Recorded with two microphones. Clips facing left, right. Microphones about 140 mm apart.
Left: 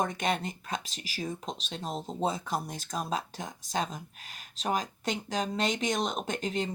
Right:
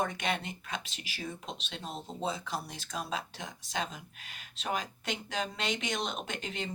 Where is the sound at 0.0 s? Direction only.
40° left (ahead or behind).